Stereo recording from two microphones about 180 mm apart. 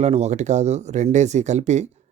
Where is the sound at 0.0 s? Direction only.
35° right (ahead or behind).